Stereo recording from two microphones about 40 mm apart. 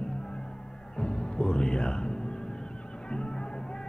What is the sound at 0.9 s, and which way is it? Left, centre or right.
Music, left.